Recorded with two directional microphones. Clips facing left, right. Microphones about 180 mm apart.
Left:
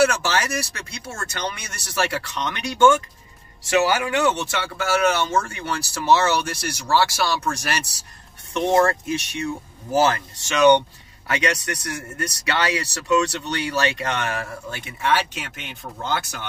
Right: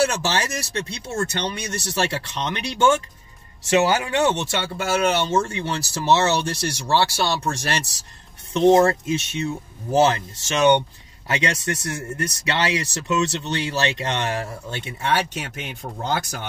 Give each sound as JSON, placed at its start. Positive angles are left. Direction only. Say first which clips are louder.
{"t": 0.0, "sound": "speech", "louder": "left 2 dB", "side_deg": -25}
{"t": 16.0, "sound": "speech", "louder": "right 1 dB", "side_deg": -40}